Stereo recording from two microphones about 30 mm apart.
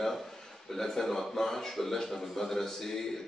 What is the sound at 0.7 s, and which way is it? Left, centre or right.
A man's voice, centre.